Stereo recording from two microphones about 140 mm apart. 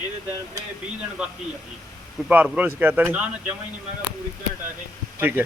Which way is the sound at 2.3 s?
10° right (ahead or behind).